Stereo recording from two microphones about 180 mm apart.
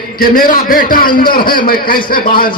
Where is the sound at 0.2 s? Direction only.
50° left (ahead or behind).